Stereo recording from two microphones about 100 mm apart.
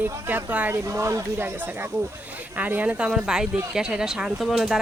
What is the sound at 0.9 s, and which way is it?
Speech, 30° right (ahead or behind).